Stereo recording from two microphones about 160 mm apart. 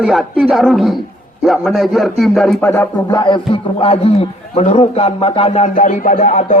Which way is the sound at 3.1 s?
30° left (ahead or behind).